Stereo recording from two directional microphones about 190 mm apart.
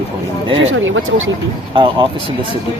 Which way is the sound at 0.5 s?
90° right.